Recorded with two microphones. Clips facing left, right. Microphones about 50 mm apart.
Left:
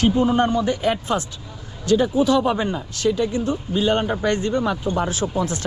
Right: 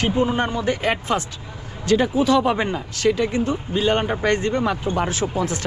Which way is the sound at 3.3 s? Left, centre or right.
Right.